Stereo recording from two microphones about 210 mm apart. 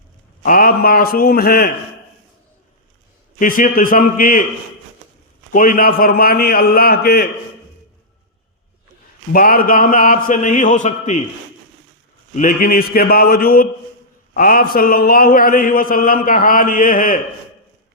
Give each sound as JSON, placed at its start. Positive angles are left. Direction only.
{"t": 0.4, "sound": "mantra", "side_deg": 40}
{"t": 3.3, "sound": "a man's voice", "side_deg": 40}
{"t": 5.5, "sound": "mantra", "side_deg": 40}
{"t": 9.3, "sound": "a man's voice", "side_deg": 40}
{"t": 12.3, "sound": "mantra", "side_deg": 40}